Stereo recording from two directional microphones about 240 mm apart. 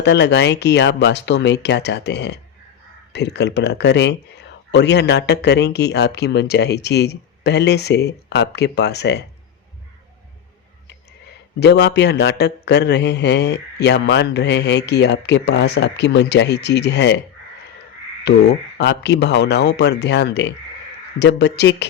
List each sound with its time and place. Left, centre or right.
0.0 s speech: left
11.6 s speech: left
18.2 s speech: left